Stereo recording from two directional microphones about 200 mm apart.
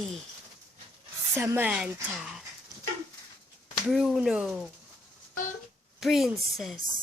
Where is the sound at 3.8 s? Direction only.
Centre (ahead or behind).